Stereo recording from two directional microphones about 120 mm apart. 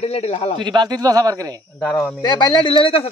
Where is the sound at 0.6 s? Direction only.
35° right (ahead or behind).